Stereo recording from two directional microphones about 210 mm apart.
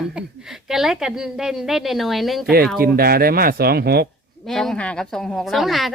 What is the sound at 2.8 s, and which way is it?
Speech, 45° right (ahead or behind).